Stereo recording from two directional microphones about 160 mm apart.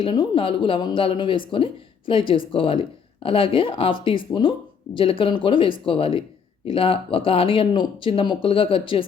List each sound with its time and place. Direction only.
0.0 s speech: 30° left (ahead or behind)